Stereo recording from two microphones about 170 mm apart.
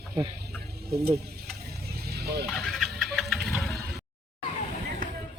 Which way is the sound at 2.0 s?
70° right (ahead or behind).